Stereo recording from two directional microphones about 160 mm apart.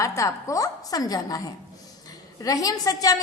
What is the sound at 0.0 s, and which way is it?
A woman's voice, 20° left (ahead or behind).